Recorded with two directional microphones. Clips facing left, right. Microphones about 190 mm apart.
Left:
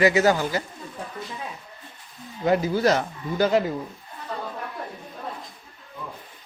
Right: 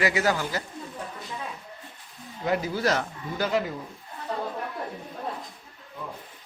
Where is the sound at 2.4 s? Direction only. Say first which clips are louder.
Left 5 dB; 25° left (ahead or behind).